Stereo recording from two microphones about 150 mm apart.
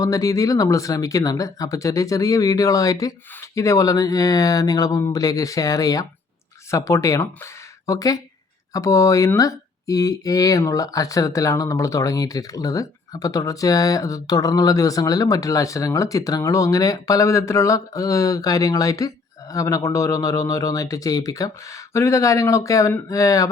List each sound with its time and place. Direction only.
0.0 s speech: 25° left (ahead or behind)